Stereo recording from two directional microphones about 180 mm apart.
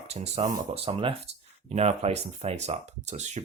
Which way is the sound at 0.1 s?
35° right (ahead or behind).